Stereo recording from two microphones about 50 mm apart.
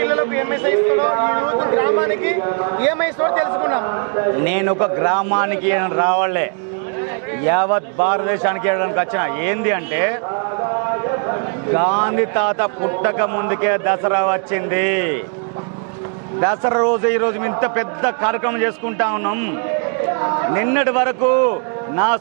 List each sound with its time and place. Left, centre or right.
0.0 s a man's voice: right
16.4 s a man's voice: right